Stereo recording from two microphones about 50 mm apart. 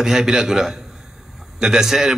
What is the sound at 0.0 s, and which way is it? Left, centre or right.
A man's voice, centre.